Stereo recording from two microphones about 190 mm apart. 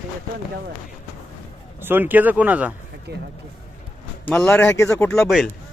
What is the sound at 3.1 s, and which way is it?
Speech, 60° right (ahead or behind).